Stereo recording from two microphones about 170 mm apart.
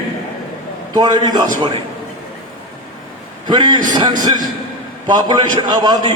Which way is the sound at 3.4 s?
25° right (ahead or behind).